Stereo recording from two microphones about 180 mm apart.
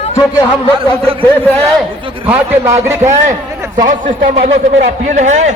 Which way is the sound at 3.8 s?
45° right (ahead or behind).